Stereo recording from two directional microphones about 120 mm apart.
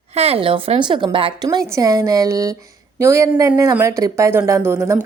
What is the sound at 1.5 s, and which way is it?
Speech, 30° right (ahead or behind).